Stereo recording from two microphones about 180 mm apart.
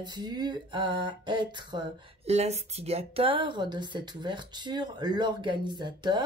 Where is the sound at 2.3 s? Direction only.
35° right (ahead or behind).